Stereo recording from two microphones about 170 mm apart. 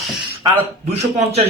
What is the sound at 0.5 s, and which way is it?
Speech, 40° right (ahead or behind).